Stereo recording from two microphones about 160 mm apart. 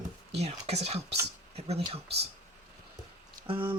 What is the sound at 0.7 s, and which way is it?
Speech, 40° right (ahead or behind).